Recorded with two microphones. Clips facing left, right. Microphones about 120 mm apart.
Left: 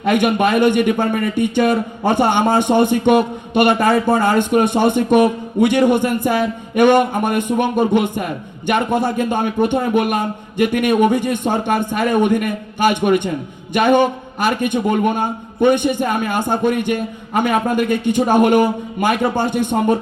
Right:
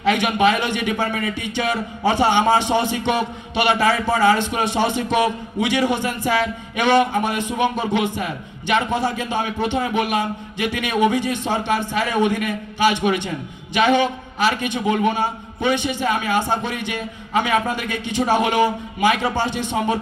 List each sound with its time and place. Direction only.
0.0 s speech: 50° left (ahead or behind)